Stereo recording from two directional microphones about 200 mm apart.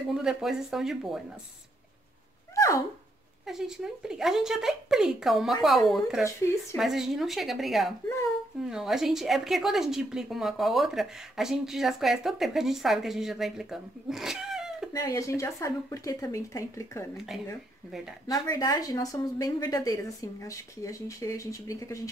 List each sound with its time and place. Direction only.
0.1 s a woman's voice: centre (ahead or behind)
3.4 s a woman's voice: centre (ahead or behind)
14.9 s a woman's voice: 15° left (ahead or behind)
18.2 s a woman's voice: 15° left (ahead or behind)